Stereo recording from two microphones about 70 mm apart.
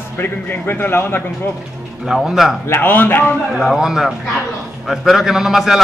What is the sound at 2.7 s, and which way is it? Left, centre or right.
Speech, left.